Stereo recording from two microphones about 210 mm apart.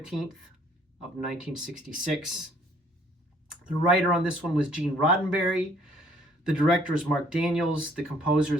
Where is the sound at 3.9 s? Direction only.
5° right (ahead or behind).